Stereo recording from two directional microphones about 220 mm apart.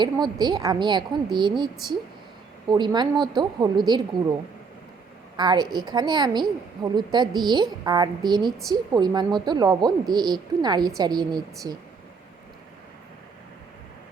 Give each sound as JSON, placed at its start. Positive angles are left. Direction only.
{"t": 0.0, "sound": "a woman's voice", "side_deg": -20}
{"t": 5.4, "sound": "a woman's voice", "side_deg": -20}